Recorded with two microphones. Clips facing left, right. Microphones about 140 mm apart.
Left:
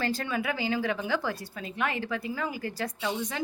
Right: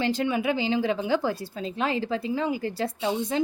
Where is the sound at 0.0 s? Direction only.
20° right (ahead or behind).